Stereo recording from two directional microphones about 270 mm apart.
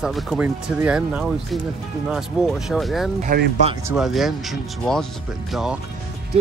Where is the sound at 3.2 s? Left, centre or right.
Right.